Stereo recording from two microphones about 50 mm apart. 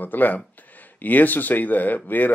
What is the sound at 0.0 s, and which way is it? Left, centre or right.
Speech, left.